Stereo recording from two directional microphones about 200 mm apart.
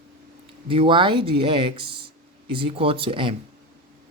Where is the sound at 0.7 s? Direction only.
25° right (ahead or behind).